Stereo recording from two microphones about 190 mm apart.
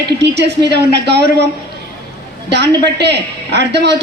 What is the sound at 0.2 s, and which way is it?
A woman's voice, 60° right (ahead or behind).